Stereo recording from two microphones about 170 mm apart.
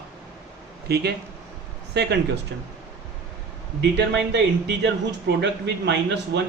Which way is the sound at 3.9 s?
90° right.